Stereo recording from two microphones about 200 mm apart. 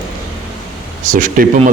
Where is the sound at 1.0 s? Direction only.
40° right (ahead or behind).